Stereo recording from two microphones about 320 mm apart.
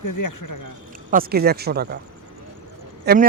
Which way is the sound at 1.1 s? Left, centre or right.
Right.